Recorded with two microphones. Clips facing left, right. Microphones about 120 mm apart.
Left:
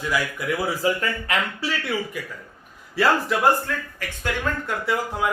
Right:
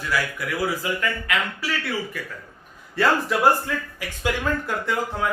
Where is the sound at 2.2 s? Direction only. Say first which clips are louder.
Left 1 dB; 15° left (ahead or behind).